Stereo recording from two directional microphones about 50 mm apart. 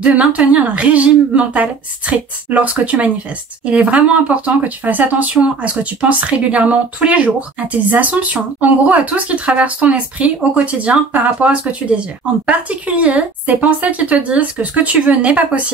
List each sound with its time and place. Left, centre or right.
0.3 s speech: right